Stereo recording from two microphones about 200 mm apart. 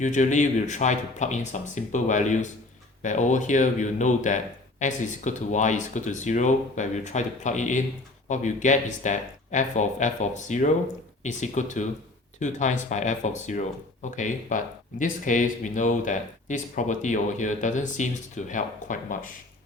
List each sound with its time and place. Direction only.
0.0 s speech: 40° left (ahead or behind)